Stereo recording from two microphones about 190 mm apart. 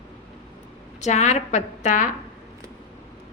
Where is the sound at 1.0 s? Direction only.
40° left (ahead or behind).